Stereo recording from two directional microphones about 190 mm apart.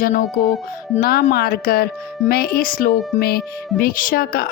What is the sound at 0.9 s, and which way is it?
Speech, 55° left (ahead or behind).